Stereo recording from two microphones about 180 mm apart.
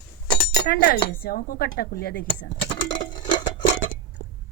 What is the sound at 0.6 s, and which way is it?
Speech, 60° left (ahead or behind).